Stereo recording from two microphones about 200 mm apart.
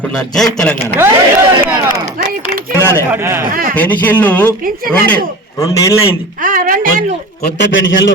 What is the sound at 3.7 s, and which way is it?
Speech, 10° left (ahead or behind).